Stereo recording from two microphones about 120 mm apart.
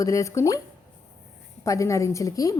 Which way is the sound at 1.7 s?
25° left (ahead or behind).